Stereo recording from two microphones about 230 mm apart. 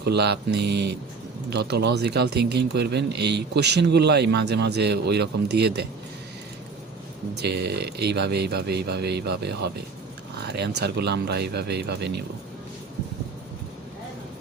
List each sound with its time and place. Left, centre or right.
0.0 s speech: right
7.3 s speech: right